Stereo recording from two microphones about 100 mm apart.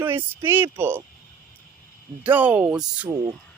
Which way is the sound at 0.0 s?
20° right (ahead or behind).